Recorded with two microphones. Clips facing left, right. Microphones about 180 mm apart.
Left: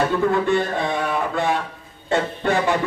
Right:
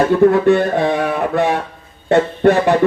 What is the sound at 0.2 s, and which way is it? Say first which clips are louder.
Speech: right 8 dB; 60° right (ahead or behind).